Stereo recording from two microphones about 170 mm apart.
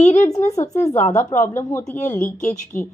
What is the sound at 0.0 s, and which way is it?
A woman's voice, 15° left (ahead or behind).